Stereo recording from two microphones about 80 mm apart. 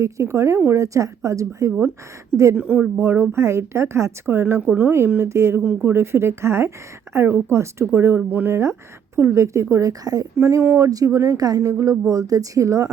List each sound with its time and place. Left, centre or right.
0.0 s a woman's voice: right
2.6 s speech: right
3.0 s a woman's voice: right
4.6 s a woman's voice: centre
9.1 s a woman's voice: right
10.3 s speech: right